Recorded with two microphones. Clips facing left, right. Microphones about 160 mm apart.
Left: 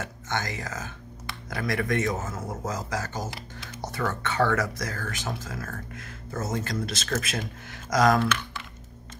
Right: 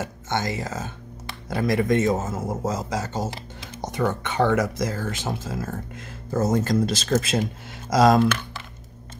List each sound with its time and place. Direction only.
0.3 s speech: 25° right (ahead or behind)
6.3 s speech: 35° right (ahead or behind)